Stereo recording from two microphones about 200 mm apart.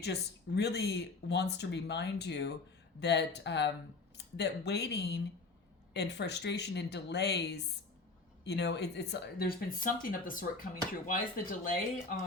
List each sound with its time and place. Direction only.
0.0 s speech: 55° left (ahead or behind)